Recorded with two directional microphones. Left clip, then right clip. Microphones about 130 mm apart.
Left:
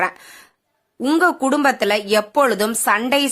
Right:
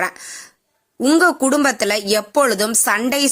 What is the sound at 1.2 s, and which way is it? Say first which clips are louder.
A woman's voice: right 1 dB; 25° right (ahead or behind).